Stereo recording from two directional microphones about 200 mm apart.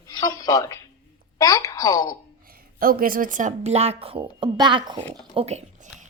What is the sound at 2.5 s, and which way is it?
Speech, 45° right (ahead or behind).